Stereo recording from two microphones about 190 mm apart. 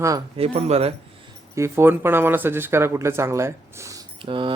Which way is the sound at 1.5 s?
15° right (ahead or behind).